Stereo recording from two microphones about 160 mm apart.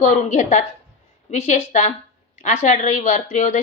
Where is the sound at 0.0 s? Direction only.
50° left (ahead or behind).